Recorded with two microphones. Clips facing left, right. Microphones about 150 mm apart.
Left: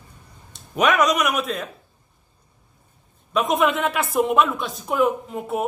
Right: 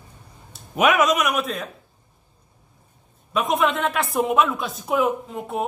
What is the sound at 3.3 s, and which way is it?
Speech, centre (ahead or behind).